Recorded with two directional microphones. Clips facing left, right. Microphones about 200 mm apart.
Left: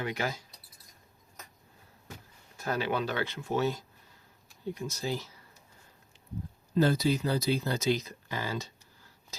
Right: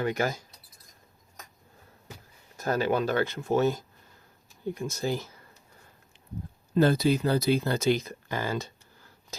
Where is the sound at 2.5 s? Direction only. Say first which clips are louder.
Right 5 dB; 45° right (ahead or behind).